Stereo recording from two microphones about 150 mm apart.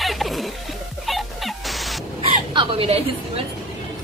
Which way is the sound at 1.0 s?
Centre (ahead or behind).